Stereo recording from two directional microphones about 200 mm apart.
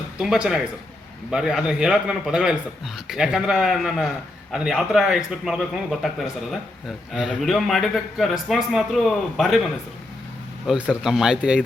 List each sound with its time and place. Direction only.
0.2 s a man's voice: 5° right (ahead or behind)
10.7 s a man's voice: 5° right (ahead or behind)